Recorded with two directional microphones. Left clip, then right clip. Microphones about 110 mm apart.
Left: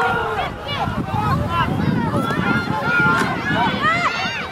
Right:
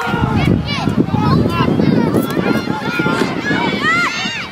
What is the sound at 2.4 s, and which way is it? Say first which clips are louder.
Run: right 1 dB; 20° right (ahead or behind).